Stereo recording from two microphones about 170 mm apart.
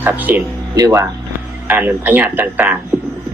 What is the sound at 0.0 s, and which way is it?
Speech, 10° right (ahead or behind).